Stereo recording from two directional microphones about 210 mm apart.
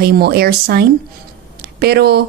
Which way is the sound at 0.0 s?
50° right (ahead or behind).